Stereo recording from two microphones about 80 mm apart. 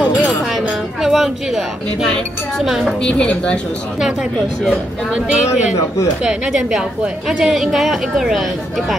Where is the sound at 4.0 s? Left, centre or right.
Centre.